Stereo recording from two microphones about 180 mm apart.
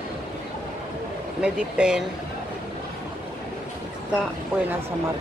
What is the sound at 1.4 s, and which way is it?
Speech, 5° right (ahead or behind).